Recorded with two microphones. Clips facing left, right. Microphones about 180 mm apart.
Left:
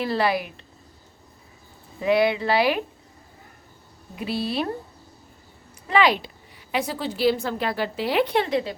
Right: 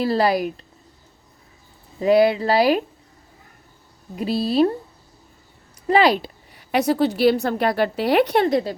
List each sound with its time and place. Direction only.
0.0 s speech: 40° right (ahead or behind)
2.0 s speech: 40° right (ahead or behind)
4.1 s speech: 40° right (ahead or behind)
5.9 s speech: 35° right (ahead or behind)
6.7 s a woman's voice: 65° right (ahead or behind)
8.3 s speech: 40° right (ahead or behind)